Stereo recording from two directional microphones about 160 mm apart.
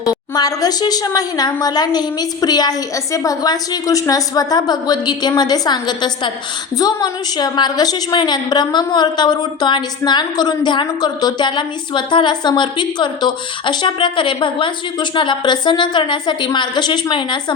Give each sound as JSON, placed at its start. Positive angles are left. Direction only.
{"t": 0.0, "sound": "a woman's voice", "side_deg": 25}